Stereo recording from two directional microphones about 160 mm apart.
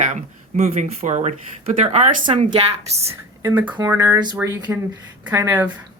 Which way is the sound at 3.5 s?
10° right (ahead or behind).